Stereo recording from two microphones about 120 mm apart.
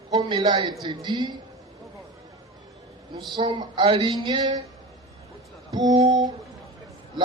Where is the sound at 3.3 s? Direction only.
40° right (ahead or behind).